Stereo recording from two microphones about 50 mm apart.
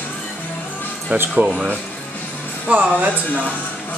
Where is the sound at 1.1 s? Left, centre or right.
Right.